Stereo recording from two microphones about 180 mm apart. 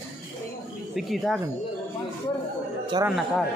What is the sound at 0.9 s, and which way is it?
Speech, centre (ahead or behind).